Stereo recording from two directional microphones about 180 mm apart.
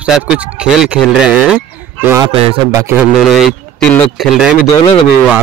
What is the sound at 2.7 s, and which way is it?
Speech, 15° right (ahead or behind).